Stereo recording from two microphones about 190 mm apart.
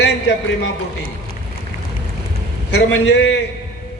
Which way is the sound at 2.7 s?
70° left (ahead or behind).